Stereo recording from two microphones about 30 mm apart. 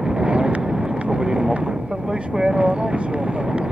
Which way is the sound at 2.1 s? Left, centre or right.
Right.